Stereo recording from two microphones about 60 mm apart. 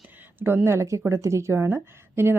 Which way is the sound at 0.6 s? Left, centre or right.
Right.